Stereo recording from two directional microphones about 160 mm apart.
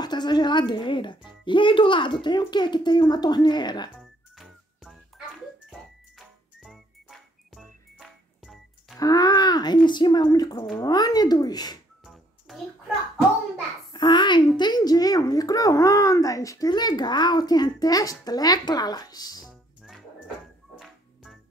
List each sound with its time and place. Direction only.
0.0 s a sound: 25° left (ahead or behind)
1.4 s a child's voice: 30° left (ahead or behind)
4.0 s music: centre (ahead or behind)
9.0 s a woman's voice: 25° left (ahead or behind)
12.0 s a sound: centre (ahead or behind)
13.9 s a woman's voice: 30° left (ahead or behind)
19.4 s music: centre (ahead or behind)